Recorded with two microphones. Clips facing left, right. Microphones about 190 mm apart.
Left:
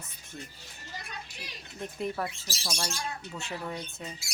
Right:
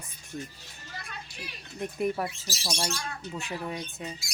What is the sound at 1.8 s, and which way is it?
Speech, 15° right (ahead or behind).